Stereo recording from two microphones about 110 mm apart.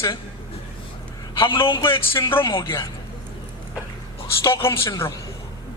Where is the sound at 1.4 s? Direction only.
50° left (ahead or behind).